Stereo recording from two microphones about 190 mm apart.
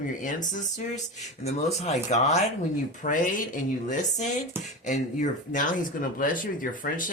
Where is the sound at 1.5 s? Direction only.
35° left (ahead or behind).